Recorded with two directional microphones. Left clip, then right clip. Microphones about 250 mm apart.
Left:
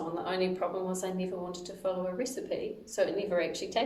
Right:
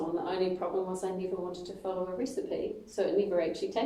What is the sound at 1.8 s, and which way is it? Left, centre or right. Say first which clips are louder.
A woman's voice: left 2 dB; left.